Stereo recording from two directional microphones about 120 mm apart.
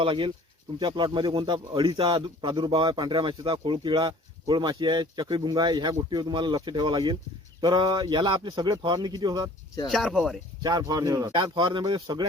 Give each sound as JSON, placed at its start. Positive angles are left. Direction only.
{"t": 0.0, "sound": "a man's voice", "side_deg": -45}
{"t": 9.9, "sound": "speech", "side_deg": 0}
{"t": 10.6, "sound": "a man's voice", "side_deg": -35}